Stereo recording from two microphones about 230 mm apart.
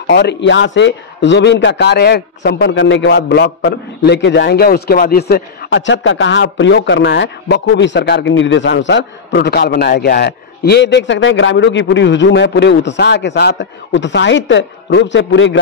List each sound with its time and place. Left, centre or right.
0.1 s a man's voice: left